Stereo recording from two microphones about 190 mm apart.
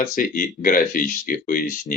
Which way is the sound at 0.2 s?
45° left (ahead or behind).